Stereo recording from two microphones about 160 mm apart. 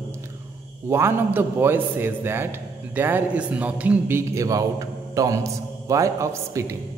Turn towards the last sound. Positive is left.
turn(degrees=-20)  # may be behind; listen again after turning